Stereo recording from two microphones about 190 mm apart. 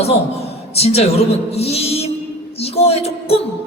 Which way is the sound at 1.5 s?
35° left (ahead or behind).